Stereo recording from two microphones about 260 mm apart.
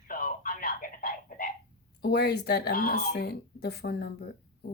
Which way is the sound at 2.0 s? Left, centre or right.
Left.